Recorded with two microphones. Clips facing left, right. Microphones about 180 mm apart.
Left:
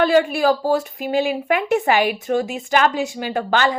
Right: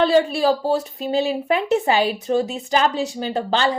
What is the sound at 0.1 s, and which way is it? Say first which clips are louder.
A woman's voice: left 1 dB; 35° right (ahead or behind).